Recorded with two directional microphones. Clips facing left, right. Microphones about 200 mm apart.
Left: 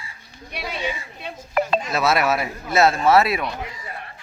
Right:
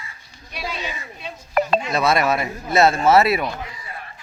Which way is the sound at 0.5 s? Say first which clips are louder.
Left 2 dB; 60° left (ahead or behind).